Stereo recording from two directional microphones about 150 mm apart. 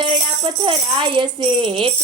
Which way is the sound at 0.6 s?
35° right (ahead or behind).